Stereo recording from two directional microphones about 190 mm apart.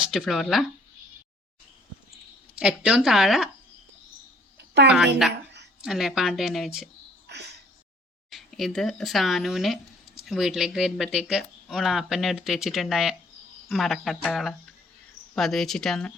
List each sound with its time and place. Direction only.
0.0 s speech: centre (ahead or behind)
2.6 s speech: 5° right (ahead or behind)
4.5 s a sound: 65° right (ahead or behind)
5.8 s speech: centre (ahead or behind)
7.3 s a sound: 65° right (ahead or behind)
8.3 s speech: centre (ahead or behind)